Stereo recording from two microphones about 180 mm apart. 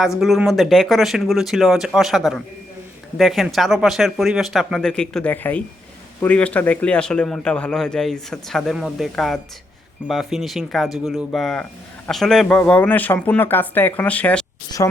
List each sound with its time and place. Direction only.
0.2 s a man's voice: centre (ahead or behind)
14.8 s a woman's voice: 20° left (ahead or behind)